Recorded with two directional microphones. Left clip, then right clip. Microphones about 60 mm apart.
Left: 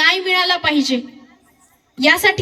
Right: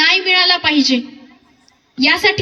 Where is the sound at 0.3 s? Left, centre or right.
Left.